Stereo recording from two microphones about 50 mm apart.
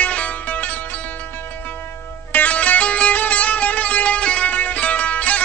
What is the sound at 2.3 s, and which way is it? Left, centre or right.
Music, left.